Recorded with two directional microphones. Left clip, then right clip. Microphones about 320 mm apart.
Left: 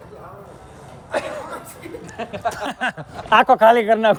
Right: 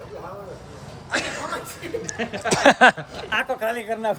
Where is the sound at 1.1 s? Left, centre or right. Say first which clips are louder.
Left 1 dB; centre.